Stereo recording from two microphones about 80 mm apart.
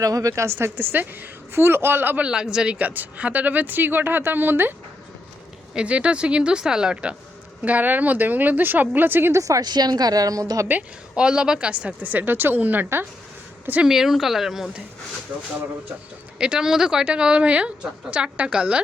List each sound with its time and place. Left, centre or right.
0.0 s a woman's voice: right
2.2 s a woman's voice: centre; by 4.7 s right
5.7 s a woman's voice: centre
9.4 s a woman's voice: right
10.7 s a woman's voice: centre
13.8 s speech: centre
16.4 s a woman's voice: centre